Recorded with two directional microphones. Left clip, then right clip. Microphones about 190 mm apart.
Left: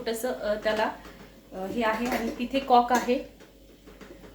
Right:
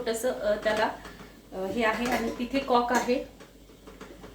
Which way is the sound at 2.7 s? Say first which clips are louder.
Left 4 dB; 25° left (ahead or behind).